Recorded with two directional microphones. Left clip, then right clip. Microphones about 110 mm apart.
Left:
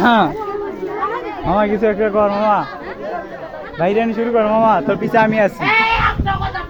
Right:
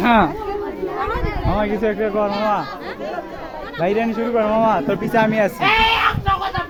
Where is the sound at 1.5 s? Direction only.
30° left (ahead or behind).